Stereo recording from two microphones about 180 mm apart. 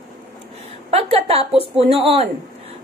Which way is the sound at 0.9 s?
35° right (ahead or behind).